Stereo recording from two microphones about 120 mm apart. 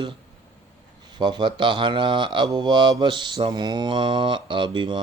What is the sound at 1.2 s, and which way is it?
Speech, 40° right (ahead or behind).